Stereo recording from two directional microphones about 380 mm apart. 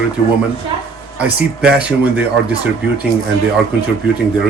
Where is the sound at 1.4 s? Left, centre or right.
Centre.